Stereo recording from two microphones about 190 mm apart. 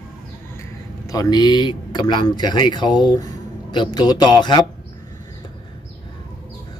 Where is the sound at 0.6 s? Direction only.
20° left (ahead or behind).